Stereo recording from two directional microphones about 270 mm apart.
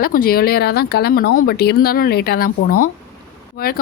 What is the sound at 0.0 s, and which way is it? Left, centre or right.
Speech, left.